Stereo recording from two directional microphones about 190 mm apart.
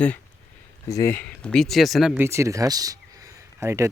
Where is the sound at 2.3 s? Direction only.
15° right (ahead or behind).